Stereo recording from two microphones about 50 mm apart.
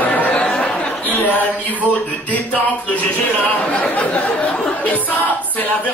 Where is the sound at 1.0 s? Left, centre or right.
Left.